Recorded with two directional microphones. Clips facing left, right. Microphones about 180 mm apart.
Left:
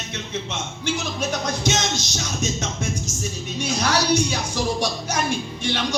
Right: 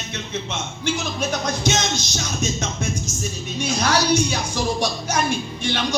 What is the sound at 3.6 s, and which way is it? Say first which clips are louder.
Music: right 2 dB; 50° right (ahead or behind).